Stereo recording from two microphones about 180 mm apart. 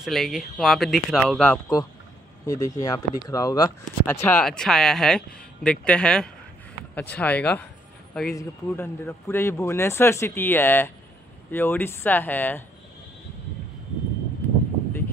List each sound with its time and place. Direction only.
0.0 s speech: centre (ahead or behind)
1.4 s speech: 15° left (ahead or behind)
8.4 s speech: 15° left (ahead or behind)